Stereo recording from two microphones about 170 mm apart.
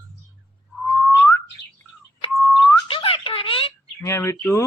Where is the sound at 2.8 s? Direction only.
30° left (ahead or behind).